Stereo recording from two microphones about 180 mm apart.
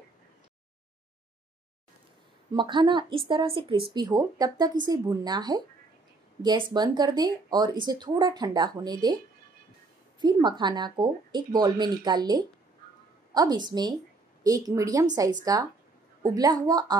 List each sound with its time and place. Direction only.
2.5 s speech: 25° right (ahead or behind)
10.2 s speech: 25° right (ahead or behind)